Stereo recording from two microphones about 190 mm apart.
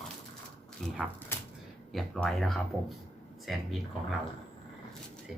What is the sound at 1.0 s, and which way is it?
Speech, centre (ahead or behind).